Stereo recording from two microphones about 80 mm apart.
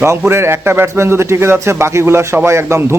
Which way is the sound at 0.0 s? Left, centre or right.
Right.